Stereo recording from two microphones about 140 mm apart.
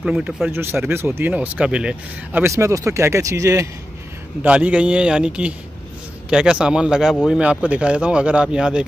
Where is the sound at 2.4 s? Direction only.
20° right (ahead or behind).